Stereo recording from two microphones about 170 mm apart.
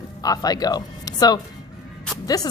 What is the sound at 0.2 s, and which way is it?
A woman's voice, 20° left (ahead or behind).